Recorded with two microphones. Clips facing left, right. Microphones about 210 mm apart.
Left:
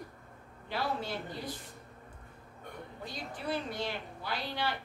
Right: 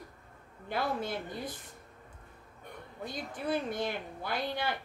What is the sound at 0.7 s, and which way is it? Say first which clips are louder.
Speech: right 2 dB; 50° right (ahead or behind).